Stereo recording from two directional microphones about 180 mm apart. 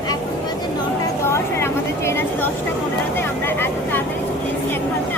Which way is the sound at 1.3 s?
15° left (ahead or behind).